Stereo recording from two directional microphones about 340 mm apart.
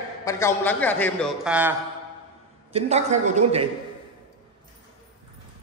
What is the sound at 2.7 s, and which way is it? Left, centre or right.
Speech, centre.